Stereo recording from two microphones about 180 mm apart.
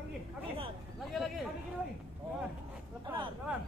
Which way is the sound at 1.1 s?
Centre (ahead or behind).